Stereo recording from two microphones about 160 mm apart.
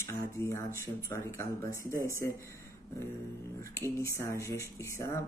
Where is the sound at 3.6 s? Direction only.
20° left (ahead or behind).